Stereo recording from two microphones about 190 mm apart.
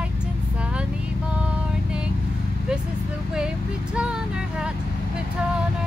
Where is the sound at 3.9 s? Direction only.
5° right (ahead or behind).